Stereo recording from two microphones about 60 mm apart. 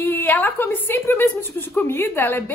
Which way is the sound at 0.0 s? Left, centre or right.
Left.